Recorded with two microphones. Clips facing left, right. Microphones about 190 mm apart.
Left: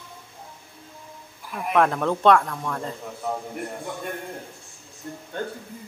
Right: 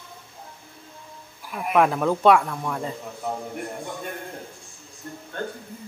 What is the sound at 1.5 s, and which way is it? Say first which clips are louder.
Speech: right 1 dB; 5° right (ahead or behind).